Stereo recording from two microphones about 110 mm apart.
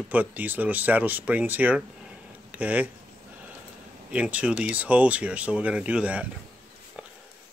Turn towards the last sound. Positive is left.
turn(degrees=-10)  # may be behind; listen again after turning